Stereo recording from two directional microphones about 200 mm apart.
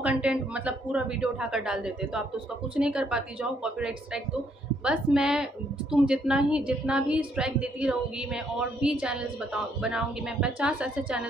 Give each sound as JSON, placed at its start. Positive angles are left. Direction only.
{"t": 0.0, "sound": "a woman's voice", "side_deg": -5}